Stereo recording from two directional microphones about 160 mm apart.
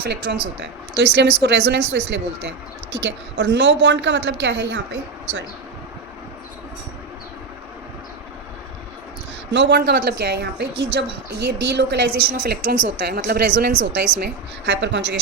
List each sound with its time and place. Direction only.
0.0 s a woman's voice: 90° right
9.5 s a woman's voice: 90° right